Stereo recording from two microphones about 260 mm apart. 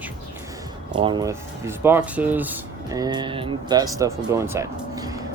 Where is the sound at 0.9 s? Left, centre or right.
Centre.